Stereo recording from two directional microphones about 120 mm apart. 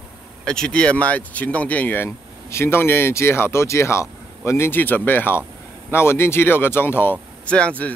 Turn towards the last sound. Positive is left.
turn(degrees=10)  # may be behind; listen again after turning